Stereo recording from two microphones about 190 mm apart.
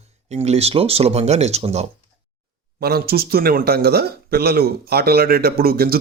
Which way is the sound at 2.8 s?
55° right (ahead or behind).